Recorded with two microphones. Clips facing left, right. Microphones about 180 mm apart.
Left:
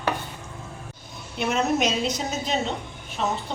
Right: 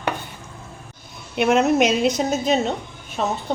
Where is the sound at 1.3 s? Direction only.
70° right (ahead or behind).